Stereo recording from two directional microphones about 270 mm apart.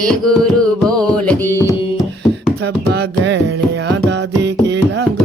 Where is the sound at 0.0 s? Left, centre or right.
Centre.